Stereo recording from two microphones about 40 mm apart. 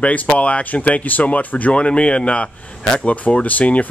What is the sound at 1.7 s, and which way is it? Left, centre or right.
Speech, left.